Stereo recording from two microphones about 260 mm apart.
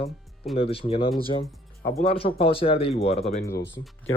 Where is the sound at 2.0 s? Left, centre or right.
Left.